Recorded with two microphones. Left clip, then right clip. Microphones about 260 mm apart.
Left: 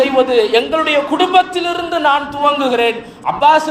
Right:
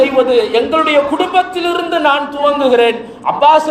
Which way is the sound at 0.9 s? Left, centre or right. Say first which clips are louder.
Even; left.